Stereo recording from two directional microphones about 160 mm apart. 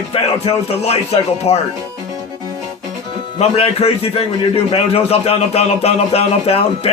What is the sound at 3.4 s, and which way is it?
A man's voice, 40° left (ahead or behind).